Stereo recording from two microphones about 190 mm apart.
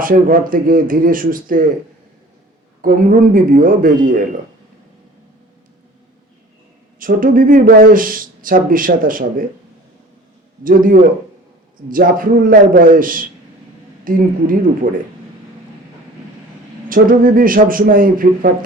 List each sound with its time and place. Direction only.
0.0 s speech: 45° right (ahead or behind)
2.8 s speech: 45° right (ahead or behind)
7.0 s speech: 45° right (ahead or behind)
10.6 s speech: 45° right (ahead or behind)
16.9 s speech: 45° right (ahead or behind)